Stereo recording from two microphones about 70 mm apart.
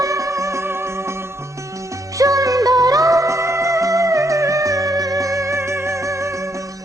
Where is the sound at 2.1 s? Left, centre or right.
Right.